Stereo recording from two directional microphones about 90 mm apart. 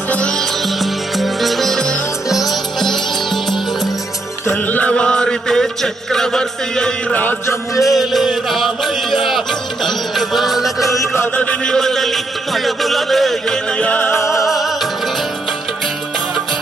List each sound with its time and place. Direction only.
0.1 s music: 10° left (ahead or behind)
4.5 s chant: 15° left (ahead or behind)
7.1 s mantra: 20° left (ahead or behind)
7.8 s music: centre (ahead or behind)
10.9 s chant: 30° left (ahead or behind)
11.3 s music: 10° left (ahead or behind)
14.3 s music: centre (ahead or behind)